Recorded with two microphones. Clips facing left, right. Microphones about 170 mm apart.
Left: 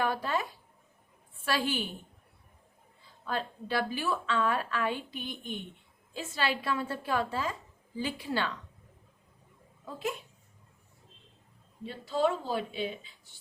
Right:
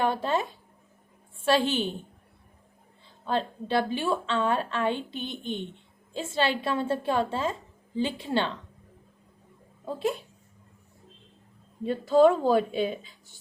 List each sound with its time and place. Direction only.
0.0 s a woman's voice: 25° right (ahead or behind)
3.2 s a woman's voice: 25° right (ahead or behind)
9.8 s speech: 30° right (ahead or behind)
11.8 s speech: 50° right (ahead or behind)